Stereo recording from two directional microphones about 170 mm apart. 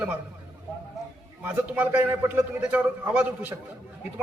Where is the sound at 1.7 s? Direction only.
10° right (ahead or behind).